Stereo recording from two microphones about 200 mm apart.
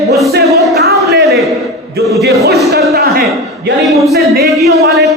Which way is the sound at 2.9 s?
50° right (ahead or behind).